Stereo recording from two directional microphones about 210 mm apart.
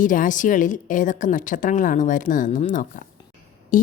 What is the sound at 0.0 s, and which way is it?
A woman's voice, 40° left (ahead or behind).